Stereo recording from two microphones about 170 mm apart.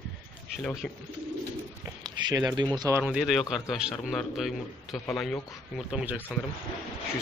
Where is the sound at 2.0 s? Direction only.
20° right (ahead or behind).